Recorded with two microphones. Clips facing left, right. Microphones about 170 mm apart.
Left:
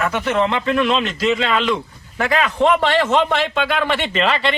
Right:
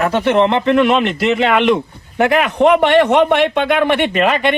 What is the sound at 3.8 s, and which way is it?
Speech, 55° right (ahead or behind).